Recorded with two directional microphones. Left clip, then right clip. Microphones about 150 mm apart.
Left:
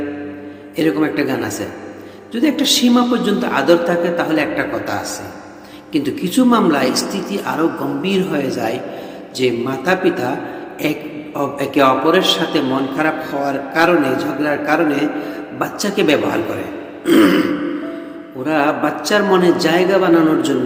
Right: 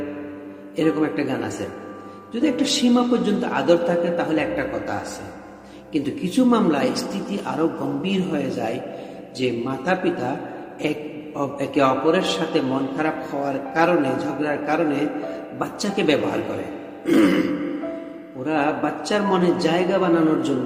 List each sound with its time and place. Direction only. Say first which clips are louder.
0.8 s a man's voice: left 5 dB; 15° right (ahead or behind)
11.3 s a man's voice: left 5 dB; 15° right (ahead or behind)
18.4 s a man's voice: left 6 dB; 15° right (ahead or behind)